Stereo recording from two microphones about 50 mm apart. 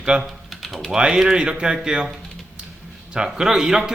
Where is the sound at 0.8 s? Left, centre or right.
Centre.